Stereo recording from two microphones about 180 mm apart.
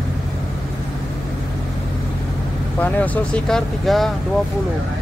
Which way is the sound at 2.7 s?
10° left (ahead or behind).